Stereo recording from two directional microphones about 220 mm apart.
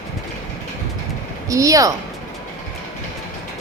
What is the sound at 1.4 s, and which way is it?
Speech, 15° right (ahead or behind).